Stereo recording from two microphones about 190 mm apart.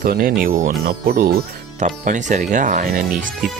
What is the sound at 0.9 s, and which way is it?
Speech, 60° right (ahead or behind).